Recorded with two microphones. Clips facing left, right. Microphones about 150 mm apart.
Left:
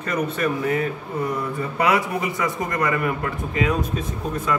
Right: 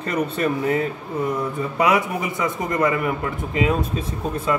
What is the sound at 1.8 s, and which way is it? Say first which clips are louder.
A man's voice: right 1 dB; 20° right (ahead or behind).